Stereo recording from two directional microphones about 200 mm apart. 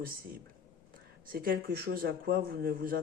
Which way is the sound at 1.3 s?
45° right (ahead or behind).